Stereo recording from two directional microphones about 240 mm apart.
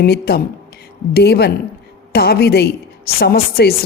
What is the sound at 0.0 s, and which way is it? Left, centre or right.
A woman's voice, left.